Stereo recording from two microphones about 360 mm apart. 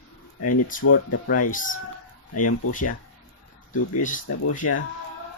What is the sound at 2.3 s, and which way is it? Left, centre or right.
Speech, left.